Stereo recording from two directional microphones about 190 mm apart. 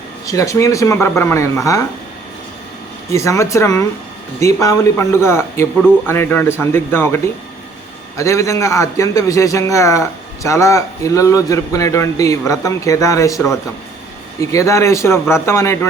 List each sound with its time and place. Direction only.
0.3 s a man's voice: 15° left (ahead or behind)
3.1 s a man's voice: 15° left (ahead or behind)
14.5 s a man's voice: 15° left (ahead or behind)